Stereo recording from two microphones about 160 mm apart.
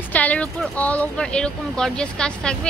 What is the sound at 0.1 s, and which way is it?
Speech, 10° left (ahead or behind).